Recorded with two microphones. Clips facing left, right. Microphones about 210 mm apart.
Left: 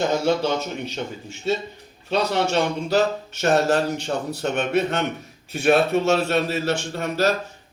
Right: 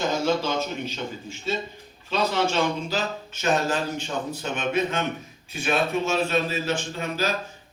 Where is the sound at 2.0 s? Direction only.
65° left (ahead or behind).